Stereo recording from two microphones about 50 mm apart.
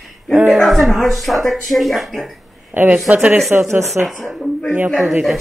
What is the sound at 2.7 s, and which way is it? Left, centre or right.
Speech, right.